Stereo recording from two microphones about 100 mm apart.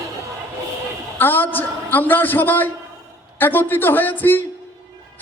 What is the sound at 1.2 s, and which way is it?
A man's voice, 20° left (ahead or behind).